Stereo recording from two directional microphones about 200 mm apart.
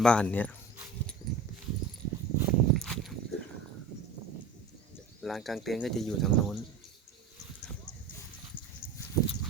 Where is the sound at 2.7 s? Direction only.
Centre (ahead or behind).